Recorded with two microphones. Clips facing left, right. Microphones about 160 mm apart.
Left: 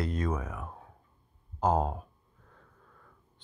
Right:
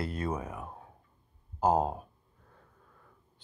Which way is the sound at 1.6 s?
10° right (ahead or behind).